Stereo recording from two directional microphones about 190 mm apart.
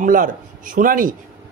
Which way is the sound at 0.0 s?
45° right (ahead or behind).